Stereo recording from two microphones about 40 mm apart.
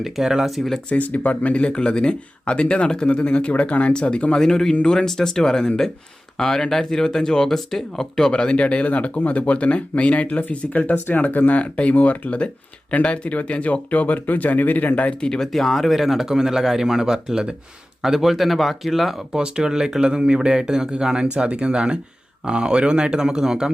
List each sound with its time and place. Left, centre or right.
0.0 s a man's voice: centre
0.9 s speech: left
1.7 s speech: left
8.3 s speech: left
10.9 s speech: left
15.4 s a man's voice: centre
19.3 s speech: centre